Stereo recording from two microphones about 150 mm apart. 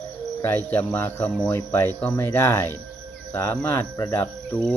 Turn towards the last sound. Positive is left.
turn(degrees=10)  # may be behind; listen again after turning